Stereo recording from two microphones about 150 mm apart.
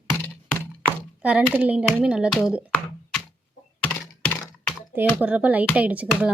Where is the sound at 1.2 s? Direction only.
10° right (ahead or behind).